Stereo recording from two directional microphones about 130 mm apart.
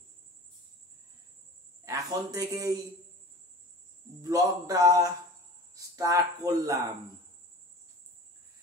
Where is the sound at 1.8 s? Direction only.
25° right (ahead or behind).